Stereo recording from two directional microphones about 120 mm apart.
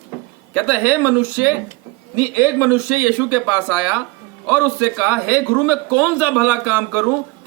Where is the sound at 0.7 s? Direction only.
15° right (ahead or behind).